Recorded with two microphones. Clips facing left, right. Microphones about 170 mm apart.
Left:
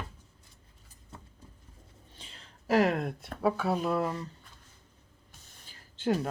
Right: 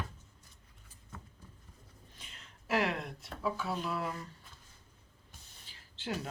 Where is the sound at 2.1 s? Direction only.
30° left (ahead or behind); by 4.1 s 45° left (ahead or behind).